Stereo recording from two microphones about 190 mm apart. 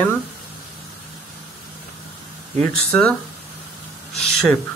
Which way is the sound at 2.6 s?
5° left (ahead or behind).